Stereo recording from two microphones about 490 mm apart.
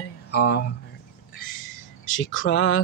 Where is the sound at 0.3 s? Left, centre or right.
Centre.